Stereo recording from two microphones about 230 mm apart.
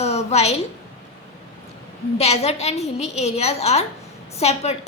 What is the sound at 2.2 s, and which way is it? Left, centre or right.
A woman's voice, left.